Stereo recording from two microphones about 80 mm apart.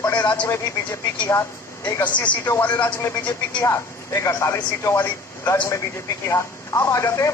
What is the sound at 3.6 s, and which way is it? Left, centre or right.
Speech, left.